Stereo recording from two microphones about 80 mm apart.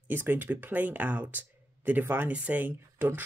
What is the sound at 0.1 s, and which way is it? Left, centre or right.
Speech, right.